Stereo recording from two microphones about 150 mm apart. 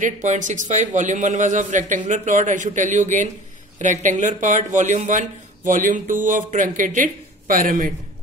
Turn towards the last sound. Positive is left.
turn(degrees=-65)  # may be behind; listen again after turning